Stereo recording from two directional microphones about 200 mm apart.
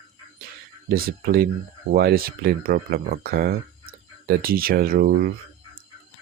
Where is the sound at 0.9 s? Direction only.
50° right (ahead or behind).